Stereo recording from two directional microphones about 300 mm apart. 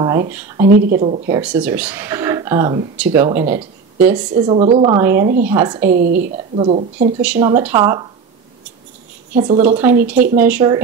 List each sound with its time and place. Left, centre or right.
0.0 s speech: centre
0.7 s a woman's voice: right
1.3 s speech: centre
4.4 s speech: centre
6.5 s a woman's voice: centre
7.2 s speech: centre
9.3 s speech: centre